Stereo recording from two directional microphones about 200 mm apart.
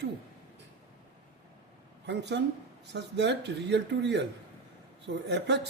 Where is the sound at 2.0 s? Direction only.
60° right (ahead or behind).